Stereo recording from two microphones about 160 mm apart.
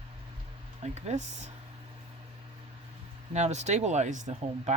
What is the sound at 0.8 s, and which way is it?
Speech, 45° right (ahead or behind).